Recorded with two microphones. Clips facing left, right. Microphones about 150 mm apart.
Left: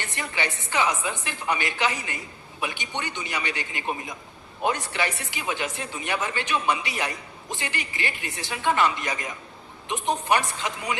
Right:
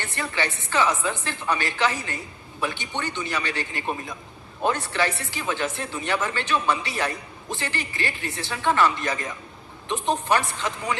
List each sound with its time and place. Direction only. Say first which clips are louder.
0.0 s speech: right 2 dB; 15° left (ahead or behind)